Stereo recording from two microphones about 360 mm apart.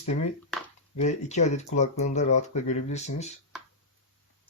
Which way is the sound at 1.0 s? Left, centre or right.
Centre.